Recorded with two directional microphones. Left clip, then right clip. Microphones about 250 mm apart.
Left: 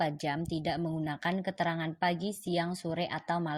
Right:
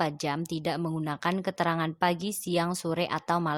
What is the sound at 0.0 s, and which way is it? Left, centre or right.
A woman's voice, centre.